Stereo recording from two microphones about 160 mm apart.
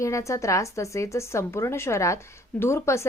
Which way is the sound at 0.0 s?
20° left (ahead or behind).